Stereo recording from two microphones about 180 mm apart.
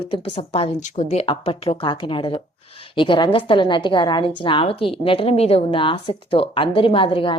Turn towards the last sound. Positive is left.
turn(degrees=30)  # may be behind; listen again after turning